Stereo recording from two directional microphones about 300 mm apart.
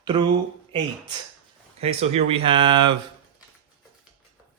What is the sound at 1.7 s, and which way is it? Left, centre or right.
Speech, centre.